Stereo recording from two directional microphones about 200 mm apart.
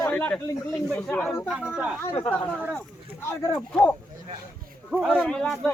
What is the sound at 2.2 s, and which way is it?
Speech, 10° left (ahead or behind).